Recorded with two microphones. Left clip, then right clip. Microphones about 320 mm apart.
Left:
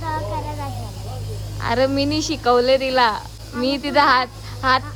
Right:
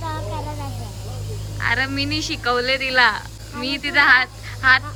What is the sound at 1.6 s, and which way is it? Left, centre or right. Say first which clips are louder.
Speech: left 2 dB; centre.